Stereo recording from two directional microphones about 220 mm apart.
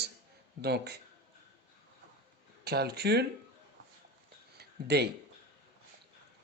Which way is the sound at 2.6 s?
45° right (ahead or behind).